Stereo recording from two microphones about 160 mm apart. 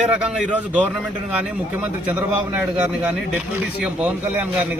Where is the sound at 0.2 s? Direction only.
5° right (ahead or behind).